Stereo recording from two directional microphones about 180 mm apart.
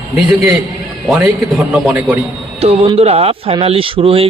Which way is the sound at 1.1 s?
5° right (ahead or behind).